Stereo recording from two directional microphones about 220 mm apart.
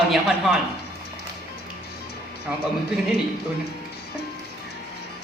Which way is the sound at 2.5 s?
5° right (ahead or behind).